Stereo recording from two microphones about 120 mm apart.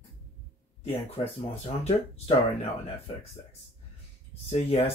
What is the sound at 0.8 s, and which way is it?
Speech, 55° left (ahead or behind).